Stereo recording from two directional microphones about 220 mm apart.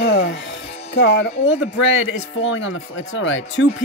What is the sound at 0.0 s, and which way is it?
Music, 50° left (ahead or behind).